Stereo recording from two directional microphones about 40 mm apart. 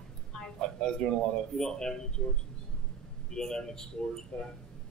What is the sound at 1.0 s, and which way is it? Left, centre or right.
A man's voice, centre.